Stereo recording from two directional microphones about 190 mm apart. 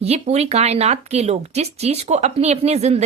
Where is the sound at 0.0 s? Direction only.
35° right (ahead or behind).